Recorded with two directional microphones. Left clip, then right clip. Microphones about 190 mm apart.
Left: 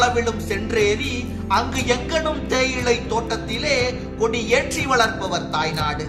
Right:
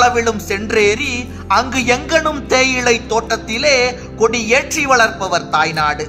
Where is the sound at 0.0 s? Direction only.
50° right (ahead or behind).